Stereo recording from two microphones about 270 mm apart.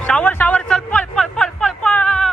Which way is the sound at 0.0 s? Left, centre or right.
Centre.